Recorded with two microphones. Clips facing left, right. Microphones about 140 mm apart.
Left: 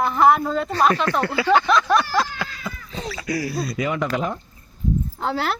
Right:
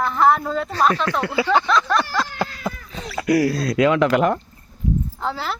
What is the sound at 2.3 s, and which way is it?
Cat, 50° right (ahead or behind).